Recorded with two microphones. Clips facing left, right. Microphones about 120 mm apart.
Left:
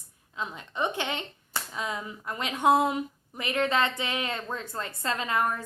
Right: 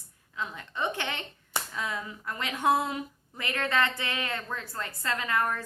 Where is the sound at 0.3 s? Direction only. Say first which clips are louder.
Left 2 dB; 20° left (ahead or behind).